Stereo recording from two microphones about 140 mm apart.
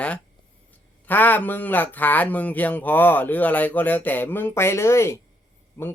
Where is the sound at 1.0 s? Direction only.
10° left (ahead or behind).